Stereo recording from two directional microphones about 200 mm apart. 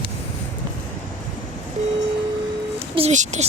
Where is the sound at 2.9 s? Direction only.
35° right (ahead or behind).